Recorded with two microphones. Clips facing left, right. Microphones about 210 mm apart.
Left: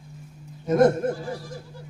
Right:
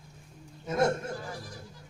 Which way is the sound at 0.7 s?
55° left (ahead or behind).